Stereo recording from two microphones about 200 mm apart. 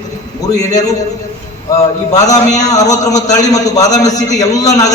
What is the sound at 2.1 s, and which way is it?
Speech, 35° left (ahead or behind).